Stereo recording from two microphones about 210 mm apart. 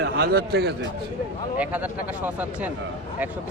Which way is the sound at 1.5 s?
5° right (ahead or behind).